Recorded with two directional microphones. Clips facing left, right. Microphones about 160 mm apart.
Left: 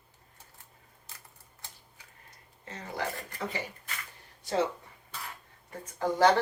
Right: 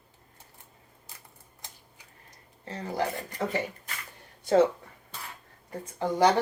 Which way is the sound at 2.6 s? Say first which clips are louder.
Right 6 dB; 30° right (ahead or behind).